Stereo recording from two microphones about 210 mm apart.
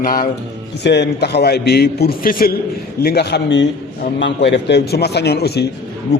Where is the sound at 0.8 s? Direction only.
55° left (ahead or behind).